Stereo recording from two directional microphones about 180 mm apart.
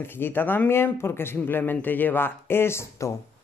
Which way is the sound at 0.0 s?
10° left (ahead or behind).